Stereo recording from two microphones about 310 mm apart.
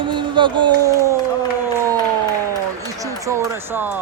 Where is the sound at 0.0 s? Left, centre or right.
Centre.